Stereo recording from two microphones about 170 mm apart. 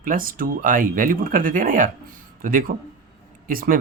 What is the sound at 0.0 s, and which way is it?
Speech, 55° right (ahead or behind).